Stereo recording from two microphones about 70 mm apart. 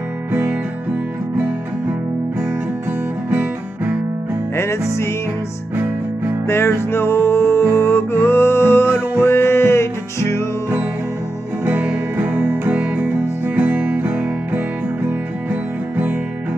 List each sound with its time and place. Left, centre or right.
0.3 s music: centre
3.3 s music: right
4.6 s music: left
6.4 s music: left
11.6 s music: right